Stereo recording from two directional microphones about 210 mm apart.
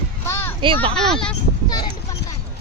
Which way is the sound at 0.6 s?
25° right (ahead or behind).